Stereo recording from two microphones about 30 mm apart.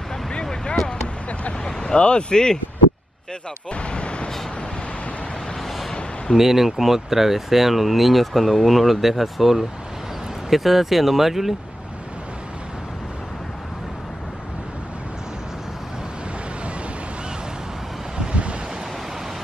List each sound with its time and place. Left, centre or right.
0.3 s a sound: left
1.6 s vehicle: left
2.3 s speech: left
3.7 s a sound: left
6.3 s speech: centre
18.3 s waves: right